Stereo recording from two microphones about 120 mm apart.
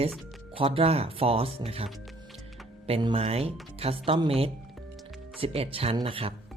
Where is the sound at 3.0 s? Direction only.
55° right (ahead or behind).